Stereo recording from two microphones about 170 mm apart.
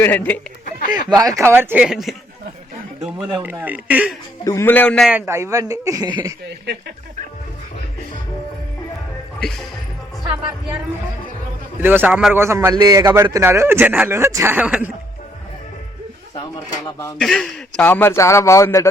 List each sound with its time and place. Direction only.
0.0 s a man's voice: 10° left (ahead or behind)
1.1 s a man's voice: 20° right (ahead or behind); by 2.1 s centre (ahead or behind)
3.2 s a man's voice: 5° right (ahead or behind)
4.4 s a man's voice: 15° left (ahead or behind)
5.0 s speech: 10° right (ahead or behind)
9.4 s speech: 5° left (ahead or behind)
11.8 s a man's voice: 10° right (ahead or behind)
17.2 s a man's voice: centre (ahead or behind)